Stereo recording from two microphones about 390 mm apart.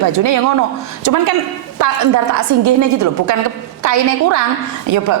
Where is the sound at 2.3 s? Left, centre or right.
Right.